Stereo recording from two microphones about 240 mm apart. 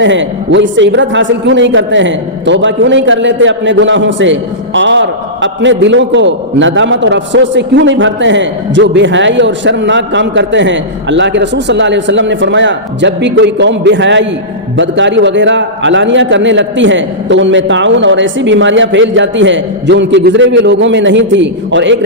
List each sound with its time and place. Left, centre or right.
0.0 s a man's voice: right